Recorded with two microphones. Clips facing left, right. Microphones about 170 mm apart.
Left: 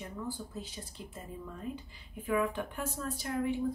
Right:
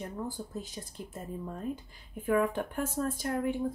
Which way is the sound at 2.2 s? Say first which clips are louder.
Right 4 dB; 45° right (ahead or behind).